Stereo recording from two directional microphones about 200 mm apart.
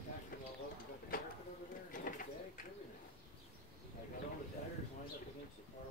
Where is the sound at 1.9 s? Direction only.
45° left (ahead or behind).